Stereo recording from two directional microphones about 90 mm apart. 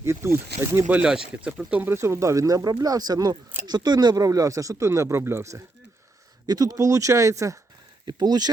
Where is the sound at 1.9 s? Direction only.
30° right (ahead or behind).